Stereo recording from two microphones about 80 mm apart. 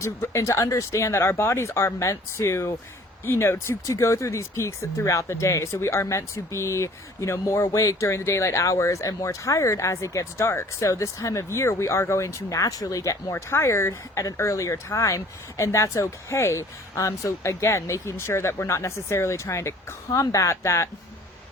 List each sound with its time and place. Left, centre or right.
0.0 s speech: left
13.3 s speech: left